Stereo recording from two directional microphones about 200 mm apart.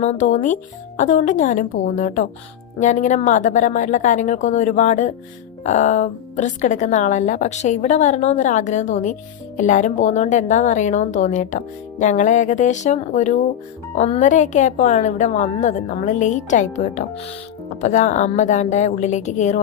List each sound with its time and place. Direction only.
0.0 s speech: 35° left (ahead or behind)